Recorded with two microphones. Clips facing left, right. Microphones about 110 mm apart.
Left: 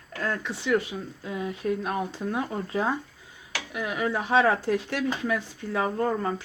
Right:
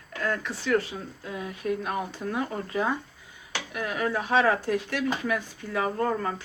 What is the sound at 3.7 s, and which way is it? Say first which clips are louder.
Speech: even; 15° left (ahead or behind).